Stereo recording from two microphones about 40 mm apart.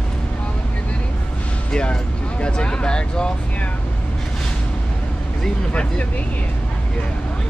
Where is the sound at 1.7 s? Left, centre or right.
Left.